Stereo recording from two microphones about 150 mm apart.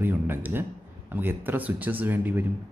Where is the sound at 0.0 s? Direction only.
15° right (ahead or behind).